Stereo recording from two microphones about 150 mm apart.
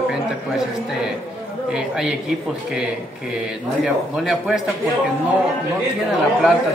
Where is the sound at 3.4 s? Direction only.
5° right (ahead or behind).